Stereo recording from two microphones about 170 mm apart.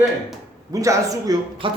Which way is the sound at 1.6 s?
30° right (ahead or behind).